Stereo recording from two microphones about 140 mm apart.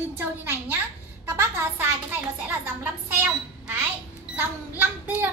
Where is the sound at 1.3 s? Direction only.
15° right (ahead or behind).